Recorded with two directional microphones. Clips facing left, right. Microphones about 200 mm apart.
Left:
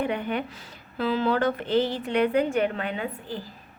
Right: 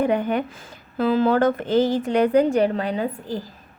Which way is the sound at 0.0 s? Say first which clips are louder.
Right 6 dB; 45° right (ahead or behind).